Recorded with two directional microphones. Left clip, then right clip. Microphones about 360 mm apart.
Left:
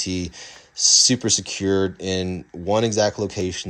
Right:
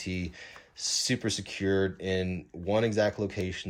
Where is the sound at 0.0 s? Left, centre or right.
Centre.